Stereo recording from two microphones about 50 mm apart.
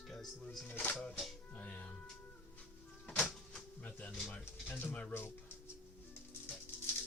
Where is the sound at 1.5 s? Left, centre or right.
Left.